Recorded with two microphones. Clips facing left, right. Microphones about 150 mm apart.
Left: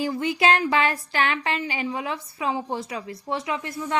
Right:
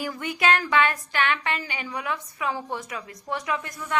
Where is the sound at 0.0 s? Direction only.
25° left (ahead or behind).